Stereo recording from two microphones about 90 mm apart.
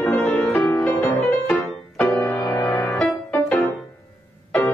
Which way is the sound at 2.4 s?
55° left (ahead or behind).